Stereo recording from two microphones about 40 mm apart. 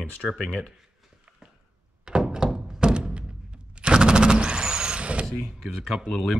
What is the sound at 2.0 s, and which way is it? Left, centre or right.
Thunk, centre.